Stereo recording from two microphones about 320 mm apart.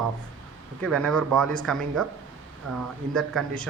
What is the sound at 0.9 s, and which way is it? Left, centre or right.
A man's voice, centre.